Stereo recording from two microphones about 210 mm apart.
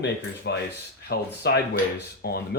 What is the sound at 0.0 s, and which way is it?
Speech, 55° left (ahead or behind).